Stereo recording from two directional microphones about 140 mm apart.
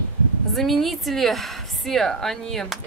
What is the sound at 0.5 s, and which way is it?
Speech, centre (ahead or behind).